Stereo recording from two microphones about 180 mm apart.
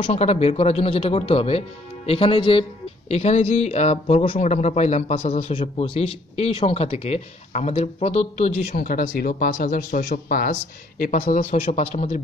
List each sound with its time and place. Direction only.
0.0 s speech: 35° left (ahead or behind)
8.6 s speech: 50° left (ahead or behind)
11.6 s speech: 35° left (ahead or behind)